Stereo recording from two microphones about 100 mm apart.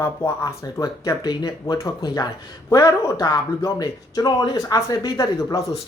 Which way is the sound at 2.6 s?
30° left (ahead or behind).